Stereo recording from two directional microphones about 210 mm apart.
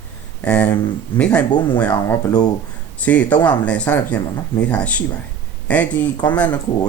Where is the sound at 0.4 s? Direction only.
5° left (ahead or behind).